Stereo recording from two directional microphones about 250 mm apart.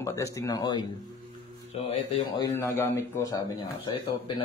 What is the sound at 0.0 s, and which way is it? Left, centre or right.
Speech, centre.